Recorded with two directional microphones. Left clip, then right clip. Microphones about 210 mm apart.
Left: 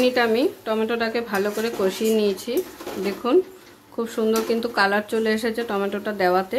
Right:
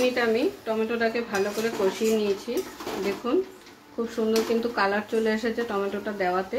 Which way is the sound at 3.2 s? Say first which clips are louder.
Left 8 dB; 55° left (ahead or behind).